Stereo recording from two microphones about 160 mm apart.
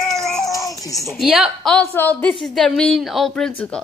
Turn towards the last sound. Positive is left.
turn(degrees=5)  # may be behind; listen again after turning